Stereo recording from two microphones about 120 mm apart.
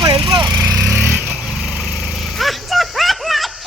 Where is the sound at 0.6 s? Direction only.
15° right (ahead or behind).